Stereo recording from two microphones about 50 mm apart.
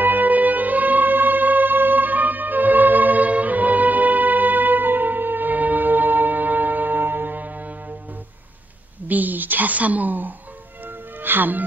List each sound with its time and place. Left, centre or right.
0.0 s music: right
9.0 s a sound: right
10.8 s music: right